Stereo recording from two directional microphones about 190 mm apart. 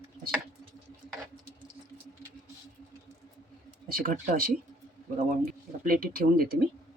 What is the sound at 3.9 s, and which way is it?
Speech, 50° right (ahead or behind).